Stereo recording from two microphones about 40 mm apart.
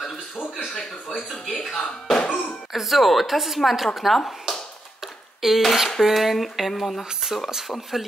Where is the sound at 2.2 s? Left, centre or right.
Left.